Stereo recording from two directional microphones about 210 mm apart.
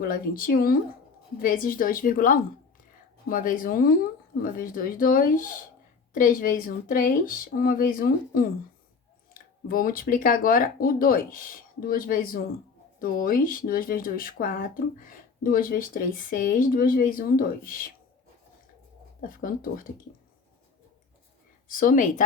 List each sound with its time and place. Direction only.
0.0 s speech: 45° left (ahead or behind)
19.2 s speech: 40° left (ahead or behind)
21.7 s speech: 40° left (ahead or behind)